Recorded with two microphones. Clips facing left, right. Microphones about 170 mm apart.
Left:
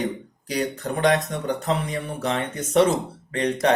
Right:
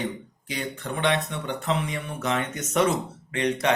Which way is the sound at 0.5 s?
40° left (ahead or behind).